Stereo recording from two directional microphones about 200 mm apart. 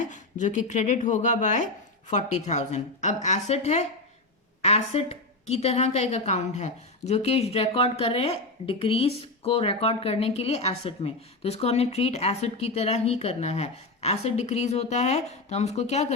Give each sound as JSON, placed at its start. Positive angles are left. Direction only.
{"t": 0.0, "sound": "a woman's voice", "side_deg": 40}